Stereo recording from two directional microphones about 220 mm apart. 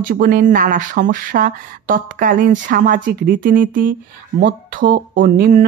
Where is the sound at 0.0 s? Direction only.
40° right (ahead or behind).